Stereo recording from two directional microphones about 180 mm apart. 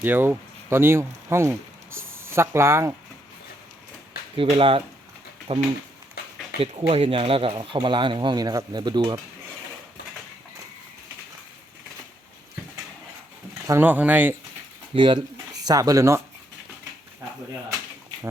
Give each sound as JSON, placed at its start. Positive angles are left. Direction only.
{"t": 0.0, "sound": "speech", "side_deg": -10}
{"t": 4.4, "sound": "speech", "side_deg": -30}
{"t": 13.7, "sound": "speech", "side_deg": -10}
{"t": 14.9, "sound": "speech", "side_deg": -30}